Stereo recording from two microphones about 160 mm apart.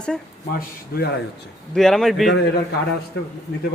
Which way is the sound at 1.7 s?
Centre (ahead or behind).